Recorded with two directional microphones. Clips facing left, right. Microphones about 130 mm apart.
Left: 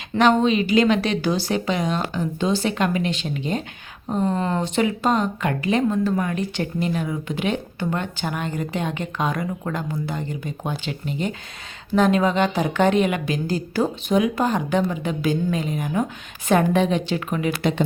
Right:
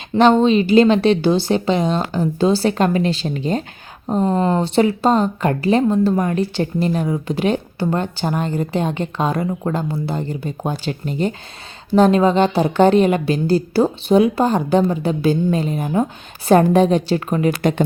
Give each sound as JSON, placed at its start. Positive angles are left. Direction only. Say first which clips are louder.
{"t": 0.2, "sound": "speech", "louder": "right 5 dB", "side_deg": -30}